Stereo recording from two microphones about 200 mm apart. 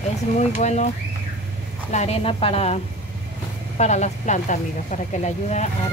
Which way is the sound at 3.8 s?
35° left (ahead or behind).